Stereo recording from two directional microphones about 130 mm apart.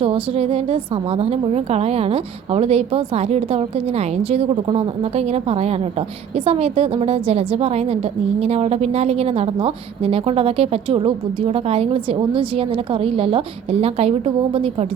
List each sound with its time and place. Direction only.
0.0 s a woman's voice: 45° right (ahead or behind)